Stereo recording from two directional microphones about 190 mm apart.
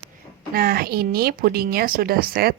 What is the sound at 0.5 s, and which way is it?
Speech, 50° right (ahead or behind).